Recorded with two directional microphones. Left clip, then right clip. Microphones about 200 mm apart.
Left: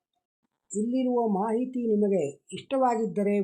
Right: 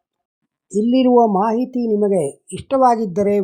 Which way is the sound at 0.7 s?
40° right (ahead or behind).